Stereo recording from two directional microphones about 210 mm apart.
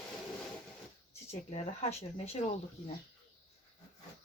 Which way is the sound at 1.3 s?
30° left (ahead or behind).